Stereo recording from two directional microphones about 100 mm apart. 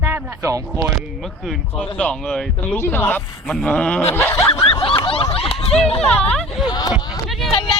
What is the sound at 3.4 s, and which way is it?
Speech, 5° left (ahead or behind).